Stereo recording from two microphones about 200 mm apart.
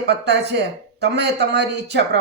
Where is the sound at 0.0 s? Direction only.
60° right (ahead or behind).